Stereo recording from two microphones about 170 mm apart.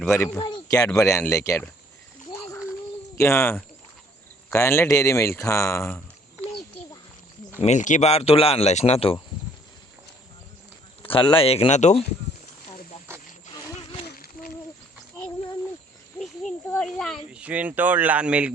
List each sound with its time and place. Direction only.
0.0 s speech: 15° left (ahead or behind)
2.3 s a sound: 15° left (ahead or behind)
3.2 s speech: 15° left (ahead or behind)
7.6 s speech: 45° left (ahead or behind)
11.0 s speech: 30° left (ahead or behind)
16.1 s a sound: 5° left (ahead or behind)
17.3 s speech: 10° right (ahead or behind)